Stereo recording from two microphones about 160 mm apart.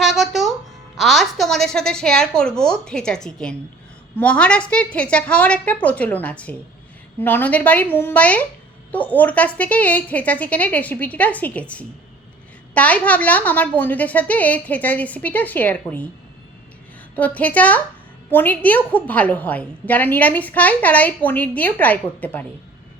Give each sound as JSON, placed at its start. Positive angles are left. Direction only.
{"t": 0.0, "sound": "music", "side_deg": 0}
{"t": 0.9, "sound": "a woman's voice", "side_deg": 0}
{"t": 17.2, "sound": "a woman's voice", "side_deg": 10}